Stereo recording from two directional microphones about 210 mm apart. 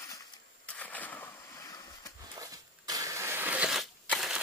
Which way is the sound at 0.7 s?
5° left (ahead or behind).